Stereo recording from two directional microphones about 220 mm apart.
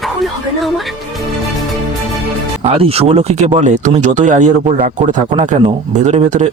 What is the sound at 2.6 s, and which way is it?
Speech, 25° right (ahead or behind).